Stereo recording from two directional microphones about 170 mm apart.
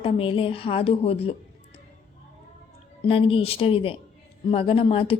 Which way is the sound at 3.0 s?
30° left (ahead or behind).